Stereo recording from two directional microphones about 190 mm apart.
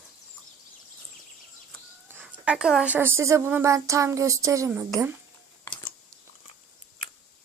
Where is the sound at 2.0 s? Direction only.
10° right (ahead or behind).